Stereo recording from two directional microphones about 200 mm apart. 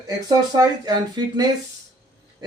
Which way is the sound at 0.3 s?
20° right (ahead or behind).